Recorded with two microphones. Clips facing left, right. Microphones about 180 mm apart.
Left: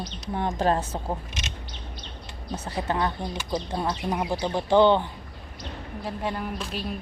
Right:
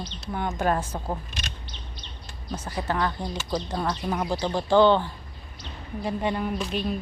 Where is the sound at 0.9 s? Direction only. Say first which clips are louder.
Left 1 dB; 15° left (ahead or behind).